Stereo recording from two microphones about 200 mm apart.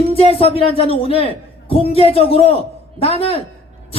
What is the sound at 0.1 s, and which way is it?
Speech, 30° left (ahead or behind).